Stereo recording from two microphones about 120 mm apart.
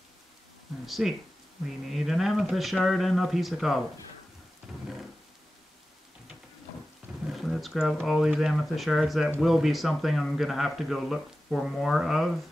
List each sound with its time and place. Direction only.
0.8 s a man's voice: centre (ahead or behind)
7.2 s a man's voice: centre (ahead or behind)